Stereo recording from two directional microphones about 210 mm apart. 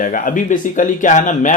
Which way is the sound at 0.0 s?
40° left (ahead or behind).